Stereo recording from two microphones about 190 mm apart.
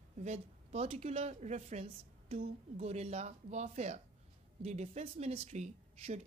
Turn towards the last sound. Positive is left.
turn(degrees=-35)  # may be behind; listen again after turning